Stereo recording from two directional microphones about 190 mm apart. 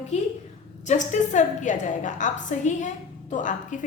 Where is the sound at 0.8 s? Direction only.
40° left (ahead or behind).